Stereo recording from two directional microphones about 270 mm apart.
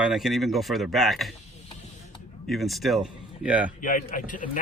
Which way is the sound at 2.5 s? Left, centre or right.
Centre.